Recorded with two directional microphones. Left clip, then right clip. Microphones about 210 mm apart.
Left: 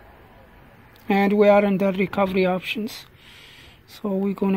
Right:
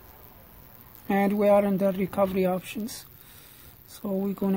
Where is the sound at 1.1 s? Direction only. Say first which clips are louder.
Left 5 dB; 5° right (ahead or behind).